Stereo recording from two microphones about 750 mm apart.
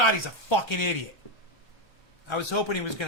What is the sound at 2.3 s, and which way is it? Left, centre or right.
Speech, left.